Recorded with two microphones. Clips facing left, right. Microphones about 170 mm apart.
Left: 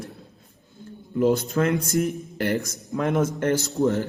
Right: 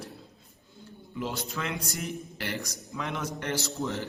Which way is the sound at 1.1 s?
45° left (ahead or behind).